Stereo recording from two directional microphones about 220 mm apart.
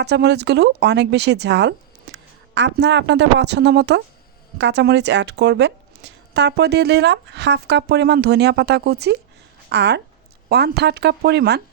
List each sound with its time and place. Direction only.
0.0 s speech: 50° right (ahead or behind)